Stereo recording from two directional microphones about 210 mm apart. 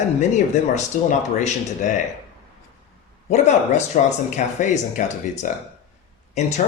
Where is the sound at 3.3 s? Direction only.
35° left (ahead or behind).